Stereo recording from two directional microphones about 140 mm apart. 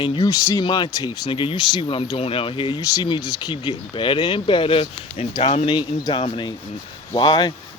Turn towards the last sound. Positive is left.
turn(degrees=30)  # may be behind; listen again after turning